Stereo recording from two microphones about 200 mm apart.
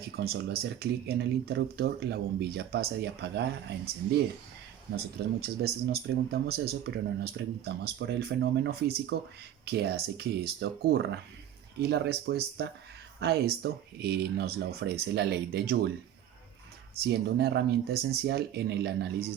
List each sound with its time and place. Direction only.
0.0 s speech: 55° right (ahead or behind)
4.9 s speech: 50° right (ahead or behind)
17.0 s speech: 55° right (ahead or behind)